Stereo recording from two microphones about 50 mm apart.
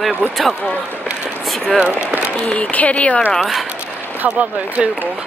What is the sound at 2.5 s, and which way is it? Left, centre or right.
Speech, left.